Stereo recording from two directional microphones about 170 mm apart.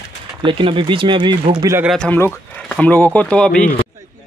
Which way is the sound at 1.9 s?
5° left (ahead or behind).